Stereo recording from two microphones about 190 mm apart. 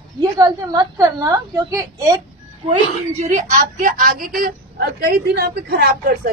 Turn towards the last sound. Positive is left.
turn(degrees=-55)  # may be behind; listen again after turning